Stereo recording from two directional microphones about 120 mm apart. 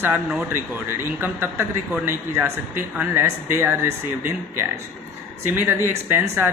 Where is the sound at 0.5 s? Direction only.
20° right (ahead or behind).